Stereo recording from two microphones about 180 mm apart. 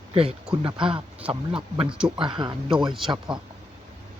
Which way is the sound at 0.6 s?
30° right (ahead or behind).